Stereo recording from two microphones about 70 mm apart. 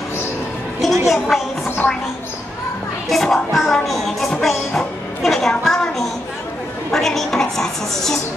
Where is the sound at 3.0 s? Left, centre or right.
Centre.